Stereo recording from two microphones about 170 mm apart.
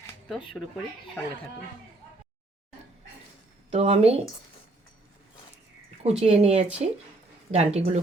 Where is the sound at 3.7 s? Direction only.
35° right (ahead or behind).